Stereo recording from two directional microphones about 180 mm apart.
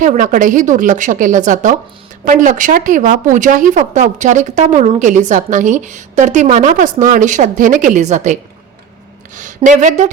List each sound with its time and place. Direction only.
0.0 s a woman's voice: 45° right (ahead or behind)
9.3 s a sound: 45° right (ahead or behind)
9.6 s a woman's voice: 40° right (ahead or behind)